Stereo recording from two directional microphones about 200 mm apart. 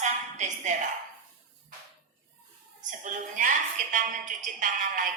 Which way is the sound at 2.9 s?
40° right (ahead or behind).